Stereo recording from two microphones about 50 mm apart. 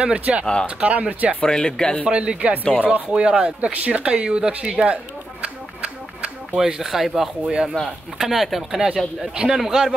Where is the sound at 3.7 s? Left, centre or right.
Right.